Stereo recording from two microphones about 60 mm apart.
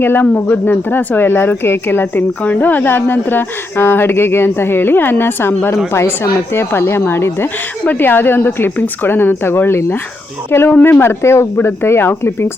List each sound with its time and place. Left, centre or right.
0.0 s a woman's voice: left
2.4 s a woman's voice: left